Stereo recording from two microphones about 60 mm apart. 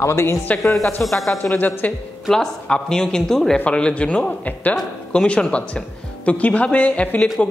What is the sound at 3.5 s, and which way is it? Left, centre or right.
Speech, centre.